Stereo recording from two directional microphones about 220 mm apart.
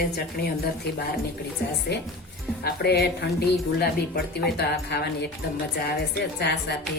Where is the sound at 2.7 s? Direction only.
45° left (ahead or behind).